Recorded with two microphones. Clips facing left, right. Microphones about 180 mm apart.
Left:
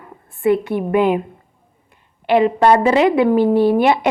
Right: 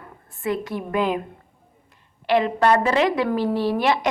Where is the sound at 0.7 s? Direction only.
55° left (ahead or behind).